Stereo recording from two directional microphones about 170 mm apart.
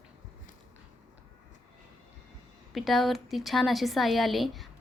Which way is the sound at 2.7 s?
Centre (ahead or behind).